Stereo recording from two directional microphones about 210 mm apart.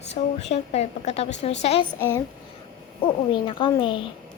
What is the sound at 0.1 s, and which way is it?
A woman's voice, 30° left (ahead or behind).